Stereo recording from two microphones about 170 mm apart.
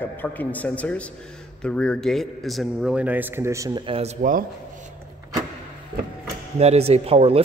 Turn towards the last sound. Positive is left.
turn(degrees=-35)  # may be behind; listen again after turning